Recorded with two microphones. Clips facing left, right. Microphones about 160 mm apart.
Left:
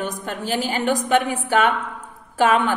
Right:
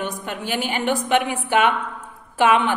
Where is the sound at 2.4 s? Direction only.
40° left (ahead or behind).